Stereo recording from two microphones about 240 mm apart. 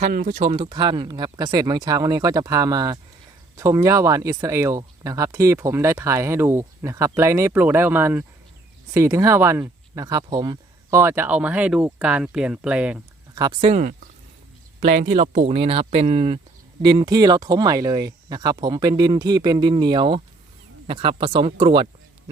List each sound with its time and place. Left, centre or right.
0.0 s speech: right
0.4 s speech: right; by 13.0 s centre
13.3 s speech: centre